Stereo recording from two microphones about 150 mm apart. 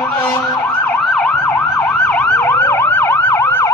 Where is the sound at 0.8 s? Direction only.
10° left (ahead or behind).